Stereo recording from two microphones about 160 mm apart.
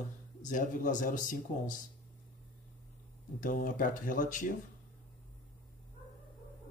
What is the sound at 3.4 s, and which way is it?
A man's voice, 55° left (ahead or behind).